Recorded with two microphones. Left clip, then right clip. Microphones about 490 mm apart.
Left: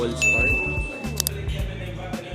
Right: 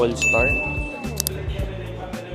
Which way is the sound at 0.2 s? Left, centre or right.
Centre.